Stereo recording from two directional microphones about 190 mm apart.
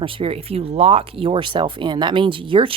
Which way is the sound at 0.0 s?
30° right (ahead or behind).